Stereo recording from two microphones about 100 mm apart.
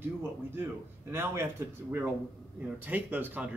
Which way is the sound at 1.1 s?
25° right (ahead or behind).